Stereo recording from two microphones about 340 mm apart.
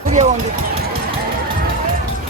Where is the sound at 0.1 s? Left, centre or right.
Right.